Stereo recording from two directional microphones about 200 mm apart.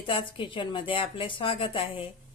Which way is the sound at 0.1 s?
25° left (ahead or behind).